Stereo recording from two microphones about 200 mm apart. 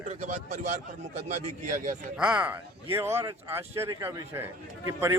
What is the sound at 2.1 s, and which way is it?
Speech, 5° right (ahead or behind).